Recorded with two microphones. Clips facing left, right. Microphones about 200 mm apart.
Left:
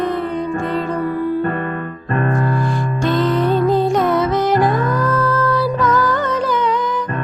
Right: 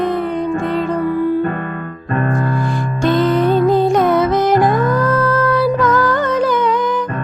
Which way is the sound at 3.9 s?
50° right (ahead or behind).